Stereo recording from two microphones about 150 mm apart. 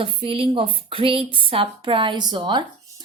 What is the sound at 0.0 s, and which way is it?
A woman's voice, 35° right (ahead or behind).